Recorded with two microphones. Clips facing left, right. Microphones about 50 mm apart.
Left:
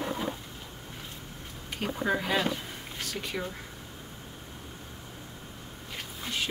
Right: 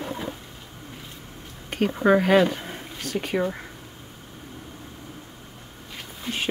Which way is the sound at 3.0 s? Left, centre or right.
Right.